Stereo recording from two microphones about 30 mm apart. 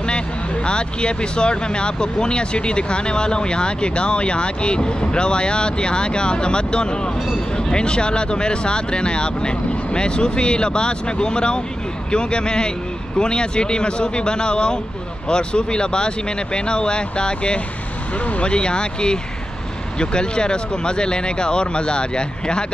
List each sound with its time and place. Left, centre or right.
0.7 s speech: left